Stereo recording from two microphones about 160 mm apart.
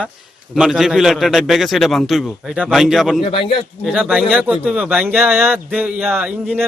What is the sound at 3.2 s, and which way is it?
Speech, 35° left (ahead or behind).